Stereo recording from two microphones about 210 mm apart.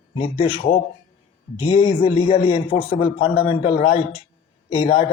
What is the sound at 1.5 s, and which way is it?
Speech, 25° left (ahead or behind).